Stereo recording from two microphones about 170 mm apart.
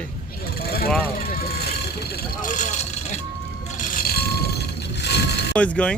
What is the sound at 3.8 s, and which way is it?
Vehicle, 60° left (ahead or behind).